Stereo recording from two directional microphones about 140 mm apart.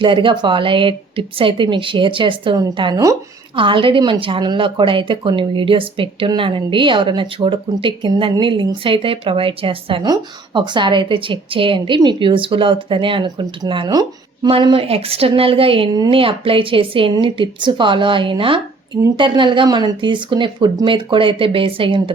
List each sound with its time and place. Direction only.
0.0 s a woman's voice: 35° right (ahead or behind)
14.5 s a woman's voice: 40° right (ahead or behind)